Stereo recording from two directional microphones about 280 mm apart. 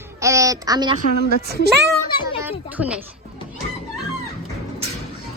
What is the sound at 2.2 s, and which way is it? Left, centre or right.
Speech, centre.